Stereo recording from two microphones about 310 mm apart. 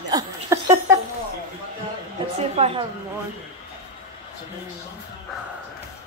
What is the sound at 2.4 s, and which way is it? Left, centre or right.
Speech, centre.